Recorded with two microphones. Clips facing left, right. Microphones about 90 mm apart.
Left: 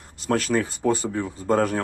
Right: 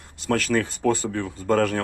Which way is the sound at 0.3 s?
25° left (ahead or behind).